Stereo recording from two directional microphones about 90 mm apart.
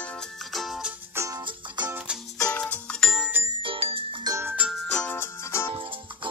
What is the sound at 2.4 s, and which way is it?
Music, 15° left (ahead or behind).